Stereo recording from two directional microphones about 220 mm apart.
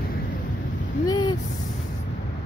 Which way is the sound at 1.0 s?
20° left (ahead or behind).